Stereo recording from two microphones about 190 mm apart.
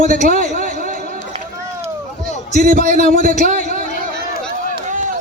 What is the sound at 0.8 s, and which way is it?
Run, 45° right (ahead or behind).